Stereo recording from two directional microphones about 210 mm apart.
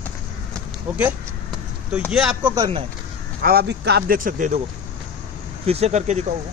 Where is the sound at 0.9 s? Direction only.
5° right (ahead or behind).